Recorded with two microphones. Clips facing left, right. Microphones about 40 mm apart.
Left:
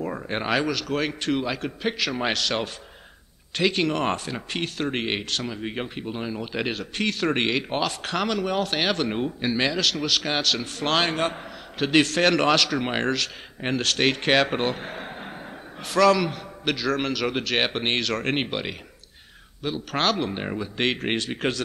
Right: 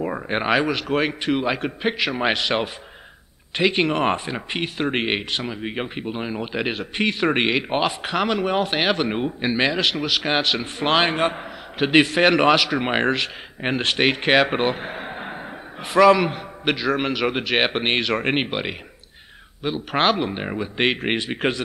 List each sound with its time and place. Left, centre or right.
0.0 s speech: right